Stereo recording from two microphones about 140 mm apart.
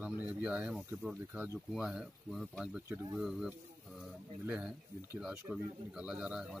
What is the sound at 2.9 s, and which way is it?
Speech, 20° right (ahead or behind).